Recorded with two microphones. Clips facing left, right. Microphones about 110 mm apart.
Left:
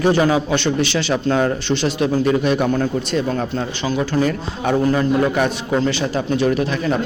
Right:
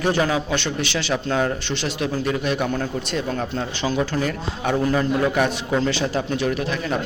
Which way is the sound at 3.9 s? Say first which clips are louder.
Left 6 dB; 5° left (ahead or behind).